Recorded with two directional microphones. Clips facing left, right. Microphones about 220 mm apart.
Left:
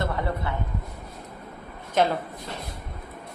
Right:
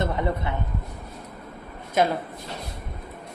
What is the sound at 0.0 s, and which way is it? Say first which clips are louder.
Speech: right 2 dB; 20° right (ahead or behind).